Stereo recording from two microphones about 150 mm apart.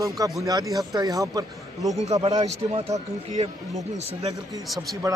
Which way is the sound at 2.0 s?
45° right (ahead or behind).